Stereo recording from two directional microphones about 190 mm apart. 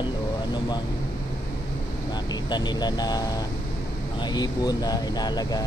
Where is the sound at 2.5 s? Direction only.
20° left (ahead or behind).